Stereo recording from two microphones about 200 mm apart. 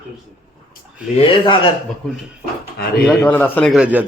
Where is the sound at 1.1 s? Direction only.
25° left (ahead or behind).